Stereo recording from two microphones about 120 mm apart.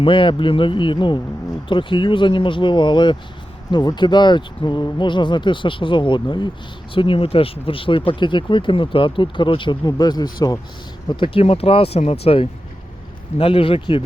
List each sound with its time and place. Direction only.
0.0 s speech: 45° left (ahead or behind)
11.1 s speech: 45° left (ahead or behind)